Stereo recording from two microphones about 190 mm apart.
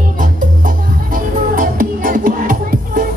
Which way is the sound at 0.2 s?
45° right (ahead or behind).